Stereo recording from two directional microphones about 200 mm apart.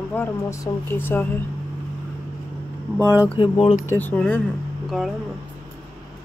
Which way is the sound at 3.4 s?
25° left (ahead or behind).